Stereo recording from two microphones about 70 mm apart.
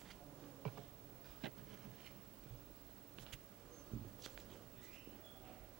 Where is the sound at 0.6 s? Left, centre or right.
Centre.